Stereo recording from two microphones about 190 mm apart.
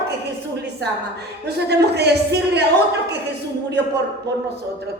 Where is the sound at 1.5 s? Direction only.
60° right (ahead or behind).